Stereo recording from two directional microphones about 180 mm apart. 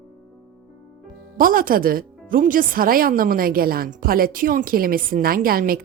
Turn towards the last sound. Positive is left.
turn(degrees=-55)  # may be behind; listen again after turning